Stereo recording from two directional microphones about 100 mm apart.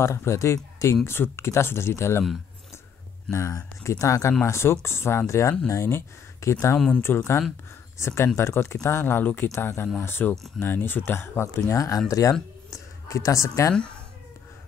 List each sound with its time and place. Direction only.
0.0 s speech: 30° left (ahead or behind)
3.3 s speech: 30° left (ahead or behind)